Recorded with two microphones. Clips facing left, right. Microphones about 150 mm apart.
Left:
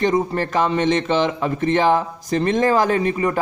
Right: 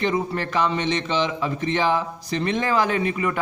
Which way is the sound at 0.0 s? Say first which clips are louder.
Left 5 dB; 40° left (ahead or behind).